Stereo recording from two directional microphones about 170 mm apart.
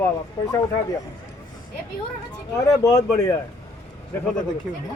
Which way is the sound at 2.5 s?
20° left (ahead or behind).